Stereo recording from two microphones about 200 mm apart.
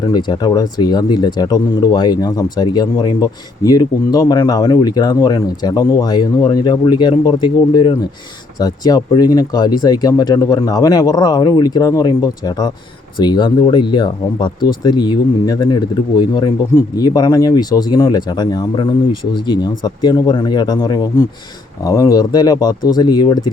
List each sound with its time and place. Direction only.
0.1 s speech: 20° left (ahead or behind)